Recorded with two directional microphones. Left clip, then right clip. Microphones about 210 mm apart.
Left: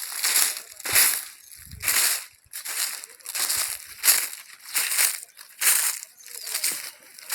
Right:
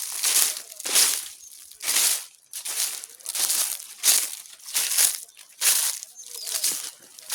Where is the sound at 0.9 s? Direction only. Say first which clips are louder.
Even; 15° left (ahead or behind).